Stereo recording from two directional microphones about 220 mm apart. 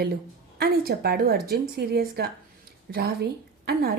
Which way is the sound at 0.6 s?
45° right (ahead or behind).